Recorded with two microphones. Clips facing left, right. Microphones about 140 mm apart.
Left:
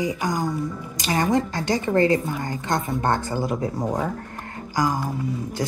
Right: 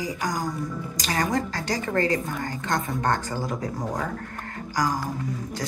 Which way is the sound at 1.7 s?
25° left (ahead or behind).